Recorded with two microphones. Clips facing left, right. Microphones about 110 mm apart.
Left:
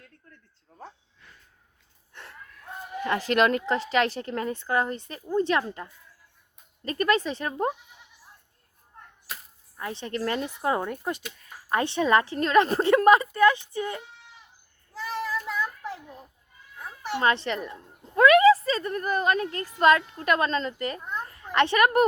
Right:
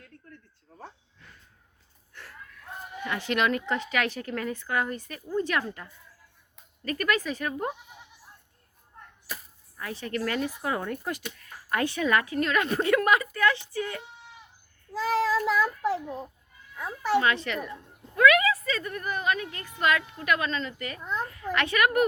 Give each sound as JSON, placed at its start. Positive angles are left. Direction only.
{"t": 3.0, "sound": "speech", "side_deg": 40}
{"t": 9.7, "sound": "speech", "side_deg": 25}
{"t": 15.0, "sound": "child singing", "side_deg": -90}
{"t": 15.4, "sound": "a sound", "side_deg": -90}
{"t": 17.2, "sound": "a woman's voice", "side_deg": 30}